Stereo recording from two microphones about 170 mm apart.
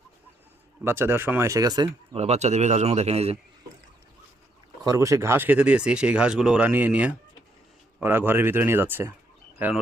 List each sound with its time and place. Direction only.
0.9 s speech: 15° right (ahead or behind)
2.1 s speech: 40° right (ahead or behind)
4.8 s speech: 20° right (ahead or behind)